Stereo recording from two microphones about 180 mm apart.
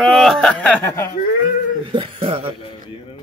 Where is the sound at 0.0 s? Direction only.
Centre (ahead or behind).